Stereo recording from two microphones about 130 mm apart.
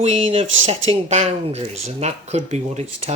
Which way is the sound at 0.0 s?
50° right (ahead or behind).